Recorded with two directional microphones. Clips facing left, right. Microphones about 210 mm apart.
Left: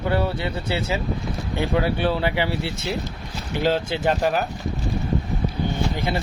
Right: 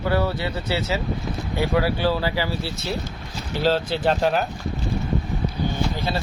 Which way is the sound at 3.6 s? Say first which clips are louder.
Right 1 dB; 10° left (ahead or behind).